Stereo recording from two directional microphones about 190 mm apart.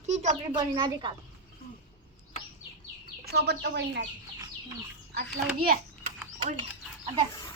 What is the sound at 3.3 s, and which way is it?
Speech, 60° right (ahead or behind).